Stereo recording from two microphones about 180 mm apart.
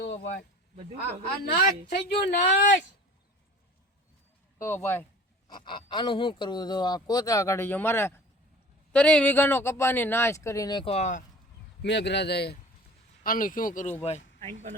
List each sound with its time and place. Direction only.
0.0 s a sound: 75° left (ahead or behind)
1.5 s a woman's voice: 60° left (ahead or behind)
2.3 s speech: 45° left (ahead or behind)
4.5 s speech: 15° left (ahead or behind)
5.5 s speech: 25° left (ahead or behind)
11.8 s speech: 75° left (ahead or behind)
13.2 s speech: 50° left (ahead or behind)
14.0 s speech: 35° left (ahead or behind)
14.4 s speech: 40° right (ahead or behind)